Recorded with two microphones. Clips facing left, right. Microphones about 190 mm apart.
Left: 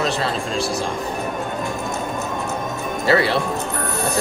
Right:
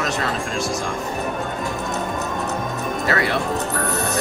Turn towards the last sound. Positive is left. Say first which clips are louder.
# left 4 dB
turn(degrees=30)  # may be behind; listen again after turning